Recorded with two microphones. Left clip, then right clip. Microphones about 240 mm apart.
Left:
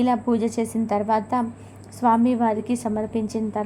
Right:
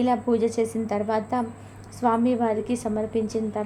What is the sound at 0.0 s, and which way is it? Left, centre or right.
A woman's voice, centre.